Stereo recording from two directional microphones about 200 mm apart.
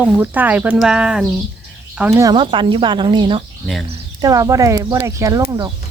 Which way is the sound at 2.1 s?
15° right (ahead or behind).